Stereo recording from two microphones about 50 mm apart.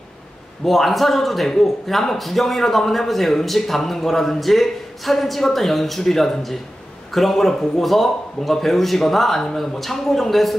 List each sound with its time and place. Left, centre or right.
0.7 s a man's voice: centre